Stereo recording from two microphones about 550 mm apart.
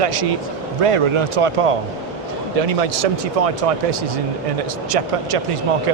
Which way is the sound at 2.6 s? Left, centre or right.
Right.